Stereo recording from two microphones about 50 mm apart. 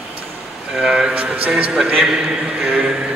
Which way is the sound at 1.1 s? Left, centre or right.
Right.